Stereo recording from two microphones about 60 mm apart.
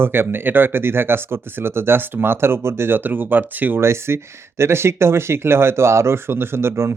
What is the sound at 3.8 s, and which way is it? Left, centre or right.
Speech, right.